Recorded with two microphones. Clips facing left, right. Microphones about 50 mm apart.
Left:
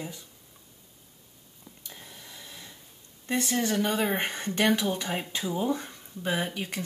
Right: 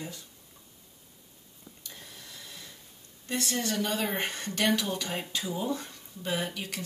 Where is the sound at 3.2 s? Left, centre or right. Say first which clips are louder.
Left 4 dB; left.